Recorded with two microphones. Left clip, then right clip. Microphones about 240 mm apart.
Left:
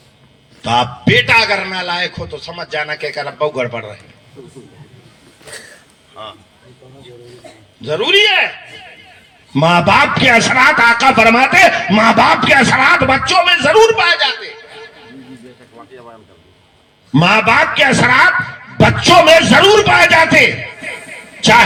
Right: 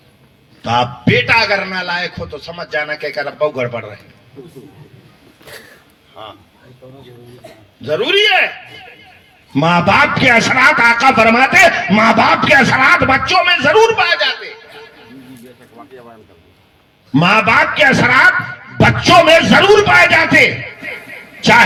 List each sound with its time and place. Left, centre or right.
0.6 s a man's voice: left
5.5 s a sound: centre
7.4 s a man's voice: right
7.8 s a man's voice: left
9.5 s a man's voice: left
17.1 s a man's voice: left